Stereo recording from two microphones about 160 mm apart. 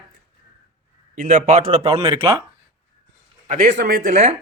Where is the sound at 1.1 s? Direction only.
50° right (ahead or behind).